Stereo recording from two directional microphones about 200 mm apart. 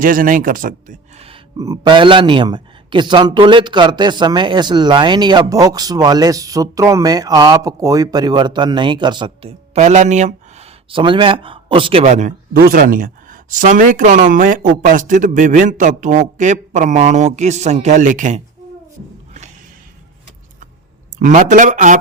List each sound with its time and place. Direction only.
0.0 s speech: 45° right (ahead or behind)
1.5 s speech: 15° right (ahead or behind); by 12.3 s 35° right (ahead or behind)
12.5 s speech: 45° right (ahead or behind)
21.2 s speech: 40° right (ahead or behind)